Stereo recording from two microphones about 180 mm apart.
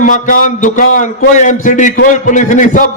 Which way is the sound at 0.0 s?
45° left (ahead or behind).